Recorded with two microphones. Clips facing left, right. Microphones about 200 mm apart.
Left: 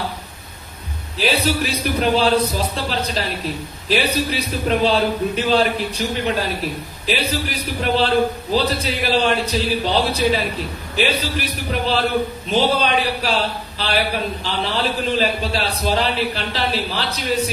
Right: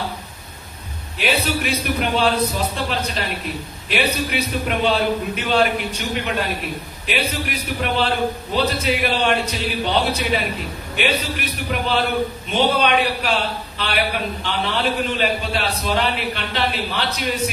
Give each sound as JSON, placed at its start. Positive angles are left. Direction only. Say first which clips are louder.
{"t": 1.1, "sound": "a man's voice", "louder": "left 2 dB", "side_deg": 35}
{"t": 7.1, "sound": "a man's voice", "louder": "left 2 dB", "side_deg": 35}